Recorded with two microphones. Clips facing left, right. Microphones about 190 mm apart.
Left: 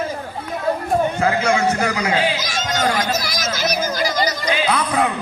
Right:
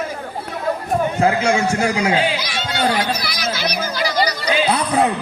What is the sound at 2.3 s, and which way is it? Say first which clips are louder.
Speech: even; 45° left (ahead or behind).